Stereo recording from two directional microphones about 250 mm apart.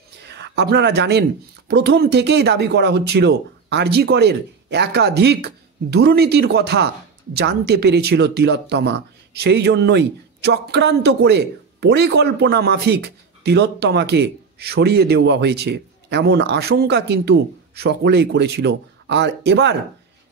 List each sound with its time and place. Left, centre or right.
0.2 s speech: right